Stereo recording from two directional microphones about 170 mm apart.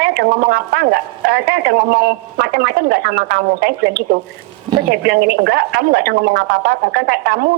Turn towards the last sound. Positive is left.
turn(degrees=-60)  # may be behind; listen again after turning